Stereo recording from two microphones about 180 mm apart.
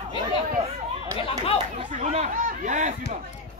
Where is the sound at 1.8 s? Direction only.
40° right (ahead or behind).